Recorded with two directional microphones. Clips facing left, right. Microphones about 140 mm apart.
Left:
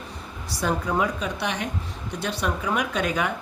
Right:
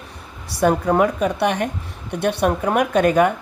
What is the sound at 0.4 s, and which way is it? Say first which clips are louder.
A woman's voice: right 9 dB; 55° right (ahead or behind).